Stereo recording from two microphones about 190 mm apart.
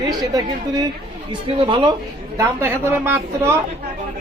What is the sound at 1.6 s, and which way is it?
Speech, 25° right (ahead or behind).